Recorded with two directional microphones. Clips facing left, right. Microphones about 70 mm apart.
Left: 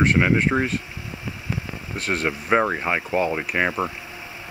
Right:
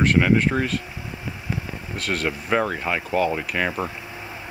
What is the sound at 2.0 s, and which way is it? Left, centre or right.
Speech, left.